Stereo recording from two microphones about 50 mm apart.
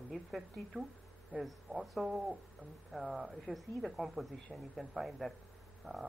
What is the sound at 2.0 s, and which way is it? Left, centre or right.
Speech, centre.